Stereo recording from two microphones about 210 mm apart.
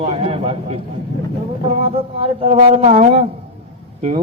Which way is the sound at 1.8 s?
25° right (ahead or behind).